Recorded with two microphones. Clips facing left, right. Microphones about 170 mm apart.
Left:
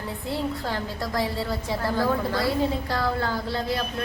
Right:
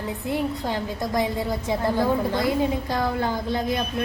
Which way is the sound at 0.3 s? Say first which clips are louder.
Right 2 dB; 15° right (ahead or behind).